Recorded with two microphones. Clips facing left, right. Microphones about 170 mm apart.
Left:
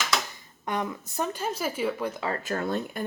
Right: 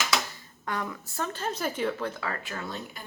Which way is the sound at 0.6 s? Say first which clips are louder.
Left 3 dB; 20° left (ahead or behind).